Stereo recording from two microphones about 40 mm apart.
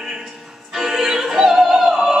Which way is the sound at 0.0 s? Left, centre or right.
Centre.